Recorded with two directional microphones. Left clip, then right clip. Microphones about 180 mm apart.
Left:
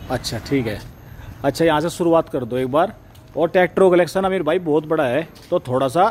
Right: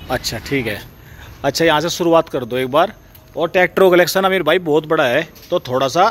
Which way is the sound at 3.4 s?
25° left (ahead or behind).